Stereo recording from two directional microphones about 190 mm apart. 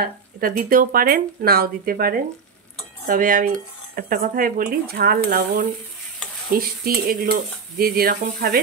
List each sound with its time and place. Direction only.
0.0 s speech: 50° right (ahead or behind)